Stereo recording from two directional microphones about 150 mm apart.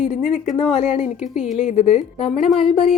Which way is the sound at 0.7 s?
50° left (ahead or behind).